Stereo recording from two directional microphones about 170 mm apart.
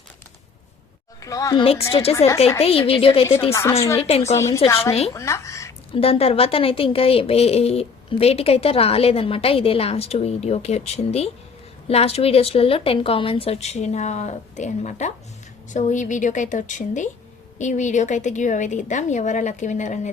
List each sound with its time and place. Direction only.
1.2 s a woman's voice: 20° left (ahead or behind)
1.6 s a woman's voice: 35° left (ahead or behind)
2.1 s a woman's voice: 15° left (ahead or behind)
2.6 s a woman's voice: 35° left (ahead or behind)
3.5 s a woman's voice: 15° left (ahead or behind)
5.1 s a sound: 15° left (ahead or behind)
5.9 s a woman's voice: 35° left (ahead or behind)